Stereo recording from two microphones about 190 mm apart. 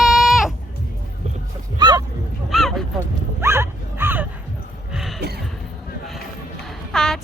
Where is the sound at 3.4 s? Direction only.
10° right (ahead or behind).